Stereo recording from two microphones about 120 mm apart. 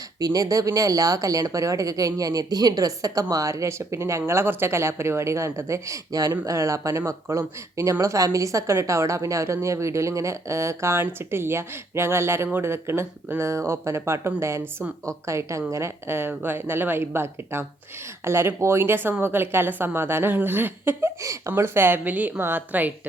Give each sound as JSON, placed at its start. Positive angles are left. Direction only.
{"t": 0.2, "sound": "a woman's voice", "side_deg": -30}